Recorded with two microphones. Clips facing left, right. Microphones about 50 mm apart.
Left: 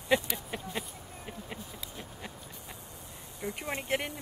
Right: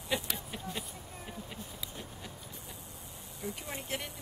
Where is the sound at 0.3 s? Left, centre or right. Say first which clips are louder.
Left 3 dB; centre.